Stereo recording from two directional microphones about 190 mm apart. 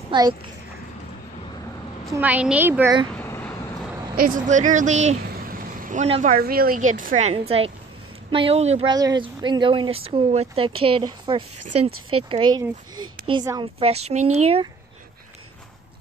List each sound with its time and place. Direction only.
0.1 s a child's voice: 25° right (ahead or behind)
2.1 s a woman's voice: 10° right (ahead or behind)
3.1 s vehicle: 10° left (ahead or behind)
4.2 s speech: 45° right (ahead or behind)
6.0 s a woman's voice: 30° right (ahead or behind)
6.3 s a woman's voice: 50° right (ahead or behind); by 8.9 s 35° right (ahead or behind)
8.9 s a woman's voice: 20° right (ahead or behind)